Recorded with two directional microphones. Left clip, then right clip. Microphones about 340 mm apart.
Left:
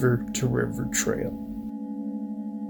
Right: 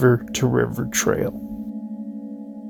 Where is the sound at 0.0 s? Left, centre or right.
Centre.